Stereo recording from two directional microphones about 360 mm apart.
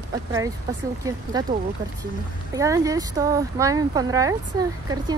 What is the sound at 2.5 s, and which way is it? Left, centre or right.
Speech, centre.